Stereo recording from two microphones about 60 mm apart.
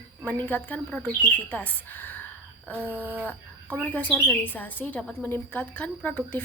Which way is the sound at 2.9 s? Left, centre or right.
Right.